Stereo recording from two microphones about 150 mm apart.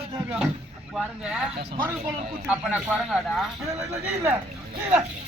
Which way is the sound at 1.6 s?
90° right.